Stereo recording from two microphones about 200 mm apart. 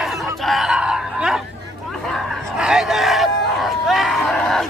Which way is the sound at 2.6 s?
5° right (ahead or behind).